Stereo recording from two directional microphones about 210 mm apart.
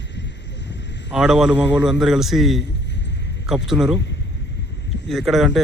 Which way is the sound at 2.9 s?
55° left (ahead or behind).